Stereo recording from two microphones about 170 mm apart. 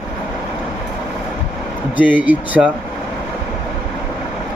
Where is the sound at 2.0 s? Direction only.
10° right (ahead or behind).